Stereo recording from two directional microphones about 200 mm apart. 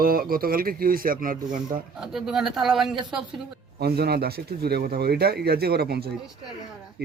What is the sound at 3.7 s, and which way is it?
A man's voice, 50° right (ahead or behind).